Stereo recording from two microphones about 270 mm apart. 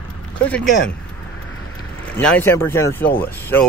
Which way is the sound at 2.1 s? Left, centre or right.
Centre.